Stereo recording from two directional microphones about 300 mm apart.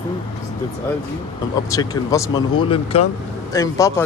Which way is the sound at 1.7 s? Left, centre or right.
Centre.